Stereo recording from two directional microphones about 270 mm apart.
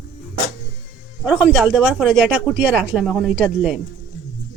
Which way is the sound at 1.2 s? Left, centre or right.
Centre.